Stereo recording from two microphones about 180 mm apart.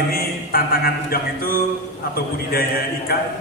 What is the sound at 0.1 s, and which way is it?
Music, 55° left (ahead or behind).